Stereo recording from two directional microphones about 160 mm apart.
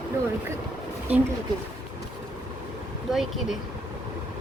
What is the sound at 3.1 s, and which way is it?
Speech, centre (ahead or behind).